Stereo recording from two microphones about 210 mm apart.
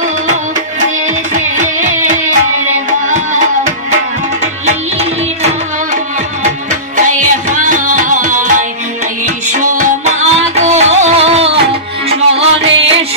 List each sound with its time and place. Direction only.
1.3 s music: 35° right (ahead or behind)
4.6 s music: 30° right (ahead or behind)
6.7 s music: 35° right (ahead or behind)